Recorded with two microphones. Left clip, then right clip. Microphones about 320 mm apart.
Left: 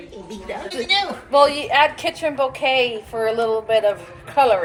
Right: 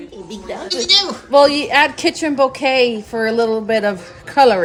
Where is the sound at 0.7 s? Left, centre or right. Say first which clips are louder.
Right 6 dB; centre.